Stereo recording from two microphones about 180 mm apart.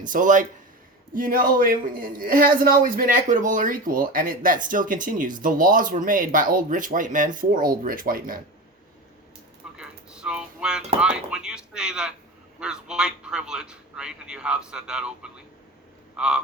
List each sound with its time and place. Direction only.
0.0 s speech: 45° right (ahead or behind)
9.7 s a man's voice: 5° right (ahead or behind)
16.1 s frog: 5° right (ahead or behind)